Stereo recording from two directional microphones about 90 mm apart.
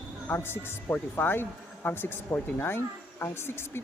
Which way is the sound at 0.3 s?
25° left (ahead or behind).